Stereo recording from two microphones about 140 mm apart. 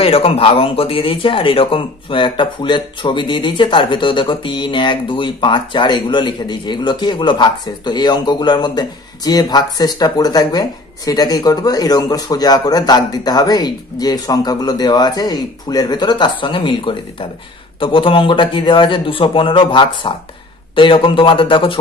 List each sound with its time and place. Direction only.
0.0 s speech: 45° left (ahead or behind)